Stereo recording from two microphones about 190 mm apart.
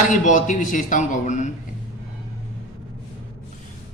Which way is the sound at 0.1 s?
40° left (ahead or behind).